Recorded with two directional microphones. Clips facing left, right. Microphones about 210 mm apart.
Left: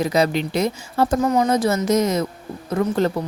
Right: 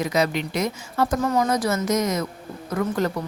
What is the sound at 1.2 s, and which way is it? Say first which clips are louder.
Speech: left 4 dB; 20° left (ahead or behind).